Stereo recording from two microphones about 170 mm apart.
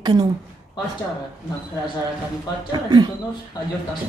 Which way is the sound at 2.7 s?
25° right (ahead or behind).